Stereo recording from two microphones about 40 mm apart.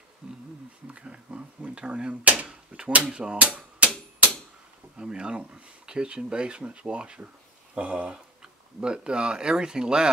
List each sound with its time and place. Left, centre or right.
0.2 s speech: centre
3.3 s speech: right
4.9 s speech: right